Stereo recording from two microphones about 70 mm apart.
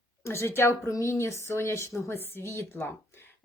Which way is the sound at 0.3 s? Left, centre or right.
Left.